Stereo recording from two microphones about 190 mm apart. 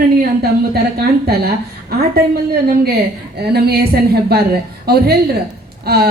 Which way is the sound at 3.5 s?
55° right (ahead or behind).